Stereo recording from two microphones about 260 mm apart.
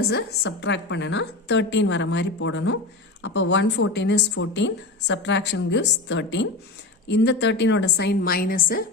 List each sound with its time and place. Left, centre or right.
0.1 s a woman's voice: left